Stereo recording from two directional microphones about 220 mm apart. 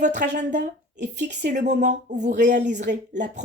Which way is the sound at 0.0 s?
35° right (ahead or behind).